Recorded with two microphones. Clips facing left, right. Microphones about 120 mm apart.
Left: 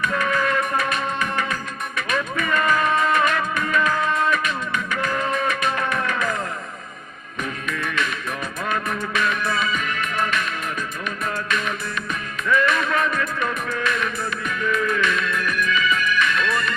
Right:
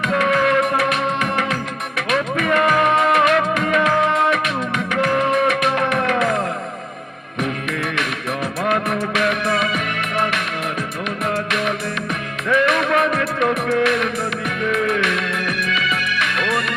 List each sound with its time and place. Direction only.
0.1 s music: 80° right
8.6 s music: 70° right (ahead or behind)
11.4 s music: 75° right (ahead or behind)